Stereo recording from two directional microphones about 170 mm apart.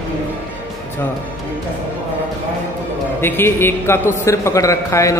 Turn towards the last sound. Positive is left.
turn(degrees=20)  # may be behind; listen again after turning